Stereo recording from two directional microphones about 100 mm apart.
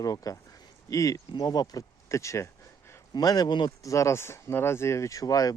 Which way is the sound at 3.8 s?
30° left (ahead or behind).